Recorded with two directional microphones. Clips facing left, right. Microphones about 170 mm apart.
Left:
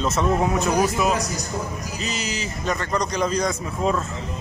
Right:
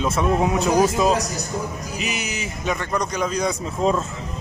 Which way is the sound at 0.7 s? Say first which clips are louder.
Right 5 dB; 30° right (ahead or behind).